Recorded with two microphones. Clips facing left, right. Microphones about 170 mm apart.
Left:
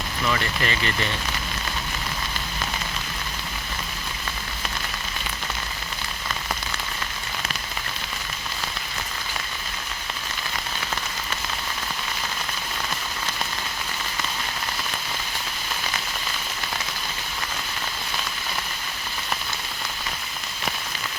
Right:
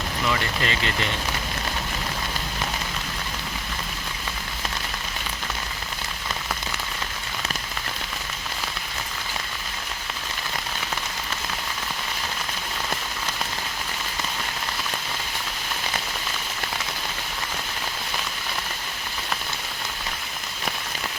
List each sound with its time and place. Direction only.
0.3 s speech: 15° right (ahead or behind)